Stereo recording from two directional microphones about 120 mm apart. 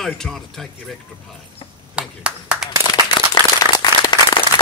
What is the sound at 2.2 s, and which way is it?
Clapping, 10° right (ahead or behind).